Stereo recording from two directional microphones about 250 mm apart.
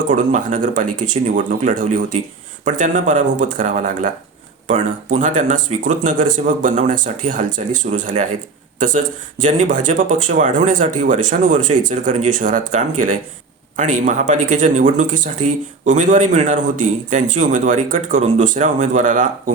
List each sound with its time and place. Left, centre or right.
0.1 s speech: right
9.4 s speech: right